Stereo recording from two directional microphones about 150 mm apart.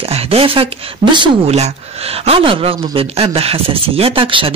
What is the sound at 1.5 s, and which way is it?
A man's voice, 45° right (ahead or behind).